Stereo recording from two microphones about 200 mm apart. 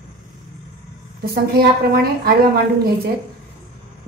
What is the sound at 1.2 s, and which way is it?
A woman's voice, 50° right (ahead or behind).